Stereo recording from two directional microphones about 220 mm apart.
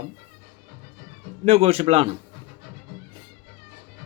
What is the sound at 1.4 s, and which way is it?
Speech, 25° right (ahead or behind).